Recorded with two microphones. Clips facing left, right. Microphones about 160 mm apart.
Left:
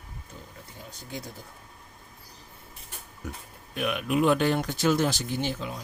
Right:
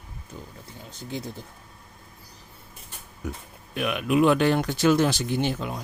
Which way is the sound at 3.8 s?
80° right.